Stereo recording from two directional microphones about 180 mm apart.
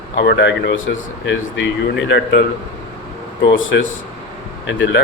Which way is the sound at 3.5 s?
90° left.